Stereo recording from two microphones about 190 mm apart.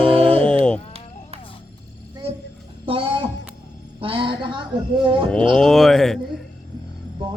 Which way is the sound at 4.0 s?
25° right (ahead or behind).